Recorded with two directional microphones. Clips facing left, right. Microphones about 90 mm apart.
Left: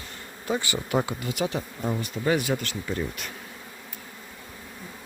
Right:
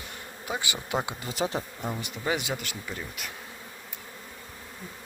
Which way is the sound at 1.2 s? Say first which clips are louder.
Left 2 dB; 30° right (ahead or behind).